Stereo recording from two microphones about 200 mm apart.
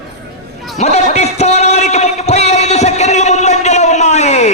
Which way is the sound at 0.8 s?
35° left (ahead or behind).